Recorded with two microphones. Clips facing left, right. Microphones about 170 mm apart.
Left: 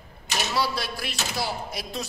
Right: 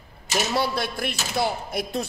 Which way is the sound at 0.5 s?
55° right (ahead or behind).